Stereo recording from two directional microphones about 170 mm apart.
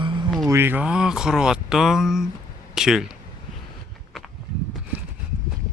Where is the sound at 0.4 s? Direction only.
15° right (ahead or behind).